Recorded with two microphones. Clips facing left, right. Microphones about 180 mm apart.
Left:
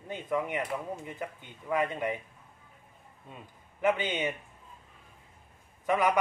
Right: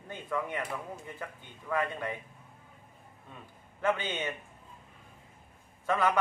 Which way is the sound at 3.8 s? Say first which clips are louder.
Left 3 dB; 15° left (ahead or behind).